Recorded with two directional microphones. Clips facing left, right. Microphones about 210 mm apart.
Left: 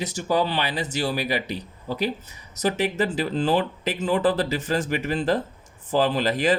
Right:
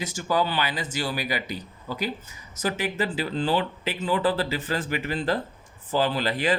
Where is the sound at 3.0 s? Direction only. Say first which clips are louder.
Left 3 dB; 45° left (ahead or behind).